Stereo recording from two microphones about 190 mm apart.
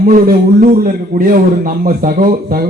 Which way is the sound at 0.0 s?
50° right (ahead or behind).